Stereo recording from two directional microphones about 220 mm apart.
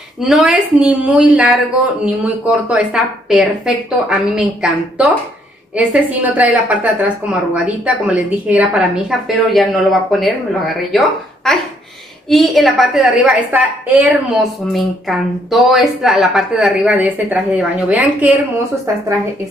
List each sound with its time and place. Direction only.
0.2 s a woman's voice: 5° right (ahead or behind)